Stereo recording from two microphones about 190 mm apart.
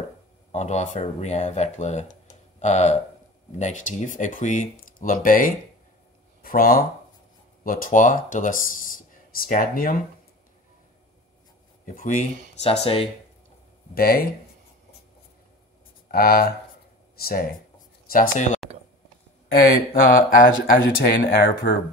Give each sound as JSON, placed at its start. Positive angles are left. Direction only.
{"t": 0.5, "sound": "speech", "side_deg": 35}
{"t": 11.8, "sound": "speech", "side_deg": 45}
{"t": 13.9, "sound": "speech", "side_deg": 55}
{"t": 16.1, "sound": "speech", "side_deg": 50}